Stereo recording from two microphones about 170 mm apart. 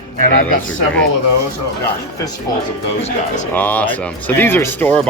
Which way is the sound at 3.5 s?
10° left (ahead or behind).